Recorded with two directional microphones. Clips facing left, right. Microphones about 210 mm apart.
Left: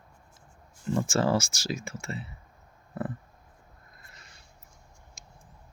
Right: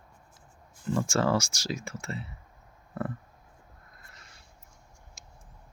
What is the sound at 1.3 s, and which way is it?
Speech, 5° left (ahead or behind).